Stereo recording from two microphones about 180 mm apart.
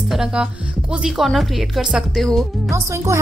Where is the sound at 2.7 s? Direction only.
15° right (ahead or behind).